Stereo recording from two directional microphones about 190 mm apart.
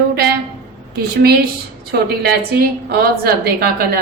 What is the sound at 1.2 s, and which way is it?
Speech, 55° right (ahead or behind).